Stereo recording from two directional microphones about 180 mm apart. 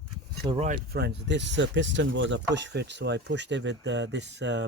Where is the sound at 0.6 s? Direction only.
55° right (ahead or behind); by 2.4 s 90° right.